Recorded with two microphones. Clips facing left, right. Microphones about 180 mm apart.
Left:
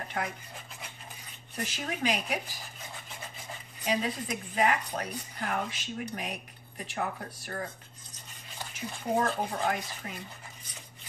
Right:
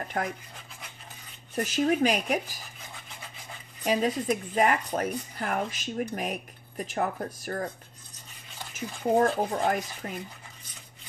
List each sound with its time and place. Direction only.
0.2 s speech: 50° right (ahead or behind)
1.5 s speech: 45° right (ahead or behind)
3.8 s speech: 45° right (ahead or behind)
8.7 s speech: 40° right (ahead or behind)